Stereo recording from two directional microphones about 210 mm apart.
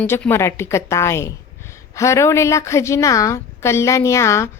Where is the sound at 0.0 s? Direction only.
10° left (ahead or behind).